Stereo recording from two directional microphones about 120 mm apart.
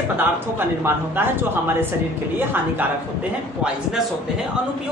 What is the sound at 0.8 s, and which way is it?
Speech, 20° right (ahead or behind).